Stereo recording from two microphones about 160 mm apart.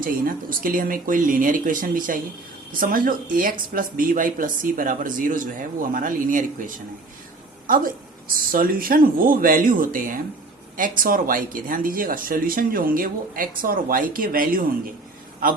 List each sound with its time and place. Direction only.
0.0 s speech: 60° right (ahead or behind)